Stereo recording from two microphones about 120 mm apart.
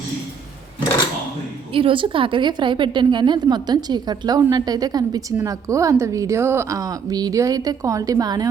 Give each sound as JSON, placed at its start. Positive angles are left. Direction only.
{"t": 1.7, "sound": "a woman's voice", "side_deg": -45}